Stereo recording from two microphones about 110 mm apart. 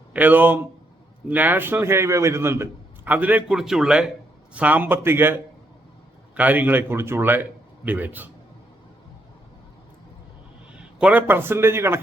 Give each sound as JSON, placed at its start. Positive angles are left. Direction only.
{"t": 0.1, "sound": "a man's voice", "side_deg": -15}
{"t": 10.8, "sound": "a man's voice", "side_deg": -15}